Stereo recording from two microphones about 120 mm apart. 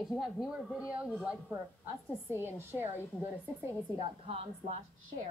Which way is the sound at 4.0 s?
55° right (ahead or behind).